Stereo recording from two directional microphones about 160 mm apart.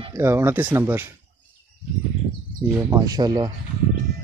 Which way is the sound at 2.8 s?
20° right (ahead or behind).